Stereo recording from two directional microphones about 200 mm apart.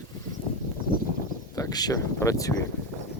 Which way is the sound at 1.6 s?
20° left (ahead or behind).